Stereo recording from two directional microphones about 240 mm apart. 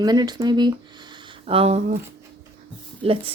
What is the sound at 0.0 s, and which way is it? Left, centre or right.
Speech, centre.